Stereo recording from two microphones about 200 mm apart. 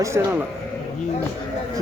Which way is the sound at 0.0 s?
15° right (ahead or behind).